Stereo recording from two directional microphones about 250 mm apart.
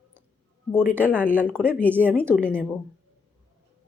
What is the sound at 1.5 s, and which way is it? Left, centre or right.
Speech, centre.